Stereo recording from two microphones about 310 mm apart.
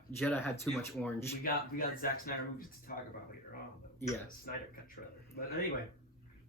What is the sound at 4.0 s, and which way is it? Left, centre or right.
Speech, left.